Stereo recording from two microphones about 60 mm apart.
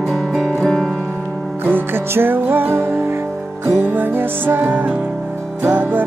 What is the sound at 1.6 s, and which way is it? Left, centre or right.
Music, right.